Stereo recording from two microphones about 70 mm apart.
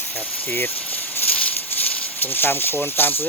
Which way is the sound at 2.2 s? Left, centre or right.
Left.